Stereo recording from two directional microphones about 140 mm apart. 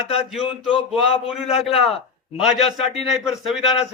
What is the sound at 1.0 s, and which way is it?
Speech, 45° left (ahead or behind).